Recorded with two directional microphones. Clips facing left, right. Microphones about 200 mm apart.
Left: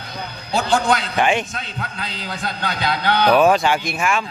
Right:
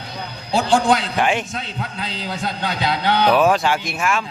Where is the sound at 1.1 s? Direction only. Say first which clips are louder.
Left 1 dB; centre (ahead or behind).